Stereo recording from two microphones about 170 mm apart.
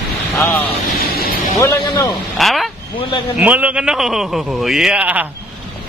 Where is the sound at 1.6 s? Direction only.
15° left (ahead or behind).